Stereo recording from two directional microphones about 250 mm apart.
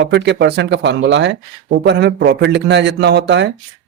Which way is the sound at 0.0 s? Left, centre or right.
Right.